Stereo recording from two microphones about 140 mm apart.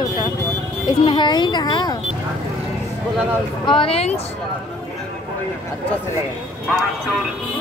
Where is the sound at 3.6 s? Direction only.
40° left (ahead or behind).